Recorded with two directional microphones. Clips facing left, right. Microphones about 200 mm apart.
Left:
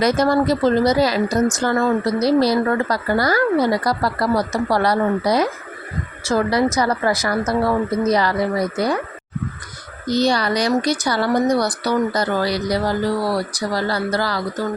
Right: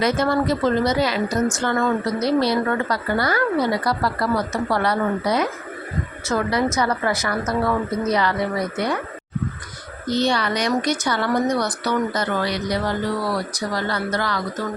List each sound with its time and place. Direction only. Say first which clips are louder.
0.0 s speech: left 3 dB; 40° left (ahead or behind)
10.1 s speech: left 3 dB; 40° left (ahead or behind)